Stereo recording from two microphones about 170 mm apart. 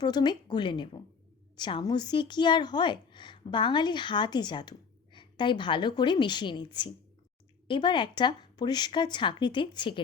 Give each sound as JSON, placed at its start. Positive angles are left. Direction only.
{"t": 0.0, "sound": "a woman's voice", "side_deg": 25}